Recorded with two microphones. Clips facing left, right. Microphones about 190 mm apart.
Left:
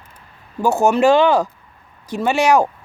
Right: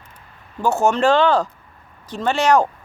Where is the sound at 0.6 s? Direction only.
10° left (ahead or behind).